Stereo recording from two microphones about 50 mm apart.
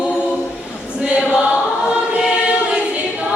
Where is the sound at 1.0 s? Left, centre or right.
Right.